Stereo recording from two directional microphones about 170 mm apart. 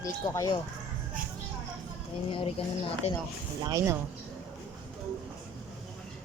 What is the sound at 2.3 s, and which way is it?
Speech, 35° left (ahead or behind).